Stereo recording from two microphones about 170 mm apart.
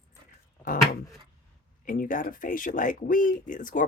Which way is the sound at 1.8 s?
55° left (ahead or behind).